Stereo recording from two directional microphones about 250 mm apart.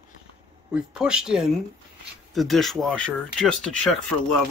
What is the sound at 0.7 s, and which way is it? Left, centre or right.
Speech, centre.